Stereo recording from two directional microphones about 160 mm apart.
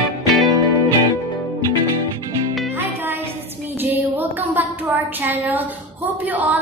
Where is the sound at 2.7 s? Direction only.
15° right (ahead or behind).